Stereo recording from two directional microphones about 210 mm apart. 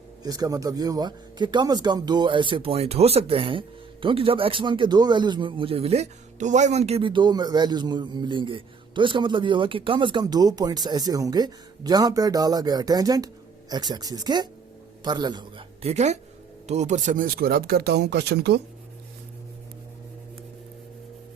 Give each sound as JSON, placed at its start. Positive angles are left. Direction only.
{"t": 0.2, "sound": "a man's voice", "side_deg": -15}